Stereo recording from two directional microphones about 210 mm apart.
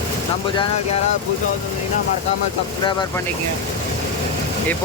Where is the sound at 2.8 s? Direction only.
20° left (ahead or behind).